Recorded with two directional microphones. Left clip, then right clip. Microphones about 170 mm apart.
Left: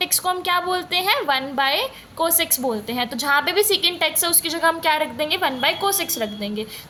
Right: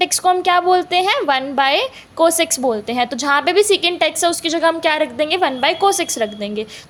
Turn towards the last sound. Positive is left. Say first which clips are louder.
# right 5 dB
turn(degrees=-40)  # may be behind; listen again after turning